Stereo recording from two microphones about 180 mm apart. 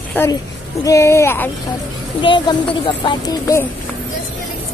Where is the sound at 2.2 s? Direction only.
25° left (ahead or behind).